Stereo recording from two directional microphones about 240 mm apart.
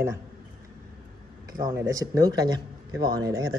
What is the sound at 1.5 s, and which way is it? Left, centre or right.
Speech, centre.